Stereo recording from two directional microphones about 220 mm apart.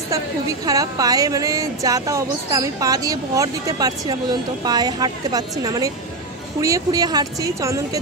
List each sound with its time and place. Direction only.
0.1 s a woman's voice: 15° right (ahead or behind)